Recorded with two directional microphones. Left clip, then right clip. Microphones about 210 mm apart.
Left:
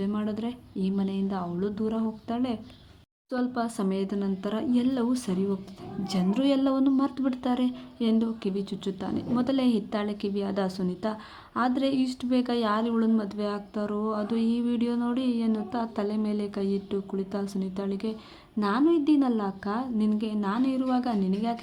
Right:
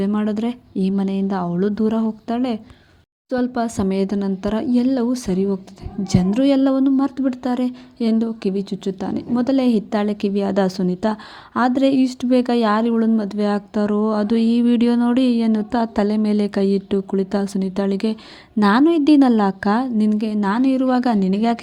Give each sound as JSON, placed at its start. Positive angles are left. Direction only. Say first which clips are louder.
{"t": 0.0, "sound": "speech", "louder": "right 10 dB", "side_deg": -30}